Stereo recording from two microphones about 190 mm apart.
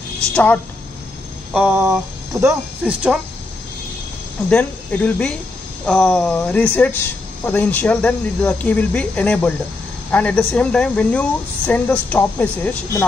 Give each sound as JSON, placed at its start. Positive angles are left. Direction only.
{"t": 0.3, "sound": "a woman's voice", "side_deg": 10}
{"t": 1.5, "sound": "a sound", "side_deg": -5}
{"t": 2.8, "sound": "speech", "side_deg": -5}
{"t": 4.5, "sound": "a woman's voice", "side_deg": 5}